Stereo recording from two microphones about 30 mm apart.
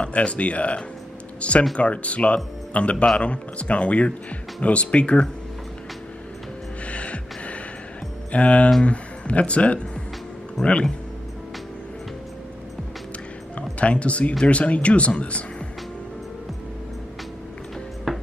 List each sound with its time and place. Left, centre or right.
0.0 s speech: left
6.9 s music: left
8.3 s speech: left
13.6 s speech: left
18.1 s ping: centre